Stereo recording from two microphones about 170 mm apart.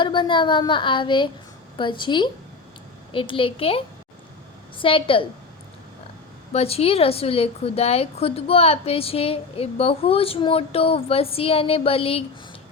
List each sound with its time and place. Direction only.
0.0 s a woman's voice: 30° left (ahead or behind)
6.5 s a woman's voice: 35° left (ahead or behind)